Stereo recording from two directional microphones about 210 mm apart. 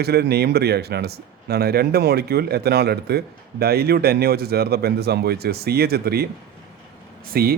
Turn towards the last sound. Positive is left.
turn(degrees=-45)  # may be behind; listen again after turning